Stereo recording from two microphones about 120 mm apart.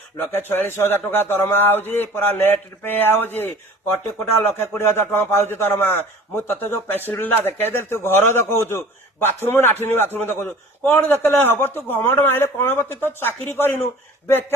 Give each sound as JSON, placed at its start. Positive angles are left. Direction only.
{"t": 0.2, "sound": "a man's voice", "side_deg": 20}